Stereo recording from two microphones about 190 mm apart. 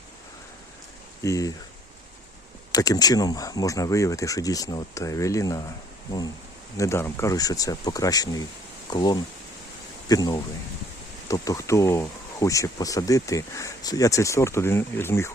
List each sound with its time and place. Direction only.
1.2 s speech: 15° left (ahead or behind)
2.7 s speech: 20° left (ahead or behind)
6.7 s speech: 15° left (ahead or behind)